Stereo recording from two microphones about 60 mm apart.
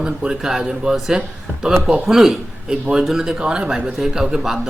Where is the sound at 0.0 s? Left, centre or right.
Centre.